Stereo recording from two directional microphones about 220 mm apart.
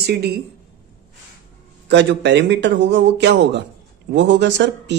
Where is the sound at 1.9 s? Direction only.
55° right (ahead or behind).